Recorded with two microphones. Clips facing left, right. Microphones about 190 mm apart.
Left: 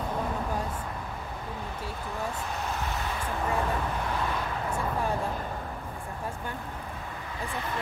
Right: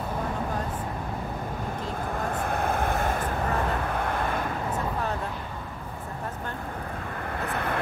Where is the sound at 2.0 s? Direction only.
55° right (ahead or behind).